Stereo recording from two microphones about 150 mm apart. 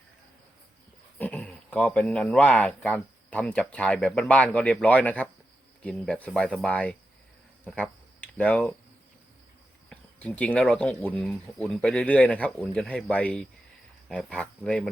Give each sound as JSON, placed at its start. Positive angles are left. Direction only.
{"t": 1.2, "sound": "speech", "side_deg": 10}
{"t": 7.7, "sound": "cricket", "side_deg": 10}
{"t": 9.9, "sound": "speech", "side_deg": 10}